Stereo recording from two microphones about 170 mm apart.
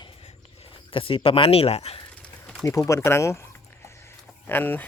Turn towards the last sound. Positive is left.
turn(degrees=10)  # may be behind; listen again after turning